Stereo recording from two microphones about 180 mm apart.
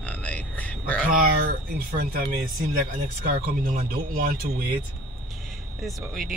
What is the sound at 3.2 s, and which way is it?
Speech, 50° right (ahead or behind).